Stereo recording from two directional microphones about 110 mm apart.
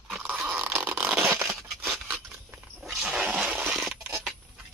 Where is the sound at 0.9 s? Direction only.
20° right (ahead or behind).